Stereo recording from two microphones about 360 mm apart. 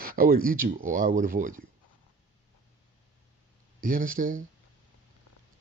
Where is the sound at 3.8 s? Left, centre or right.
Right.